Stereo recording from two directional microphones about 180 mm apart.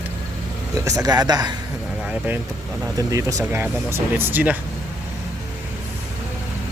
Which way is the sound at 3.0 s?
20° right (ahead or behind).